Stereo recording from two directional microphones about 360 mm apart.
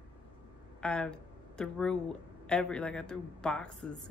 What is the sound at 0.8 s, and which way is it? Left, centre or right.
A woman's voice, centre.